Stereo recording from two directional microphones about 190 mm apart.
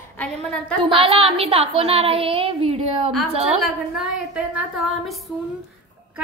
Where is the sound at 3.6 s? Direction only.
5° right (ahead or behind).